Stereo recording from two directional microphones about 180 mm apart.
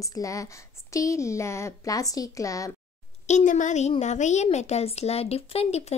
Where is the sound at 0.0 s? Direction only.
20° left (ahead or behind).